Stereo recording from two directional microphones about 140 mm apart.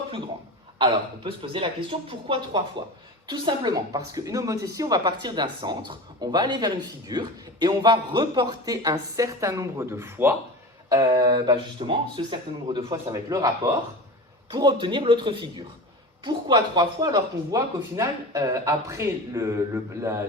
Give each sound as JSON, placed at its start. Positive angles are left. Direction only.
{"t": 0.8, "sound": "a woman's voice", "side_deg": -40}
{"t": 10.8, "sound": "a woman's voice", "side_deg": -30}